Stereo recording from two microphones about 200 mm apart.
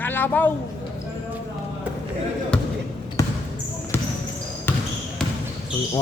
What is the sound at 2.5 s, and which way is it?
Basketball bounce, 5° left (ahead or behind).